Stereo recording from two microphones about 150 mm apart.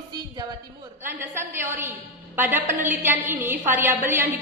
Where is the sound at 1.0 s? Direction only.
15° right (ahead or behind).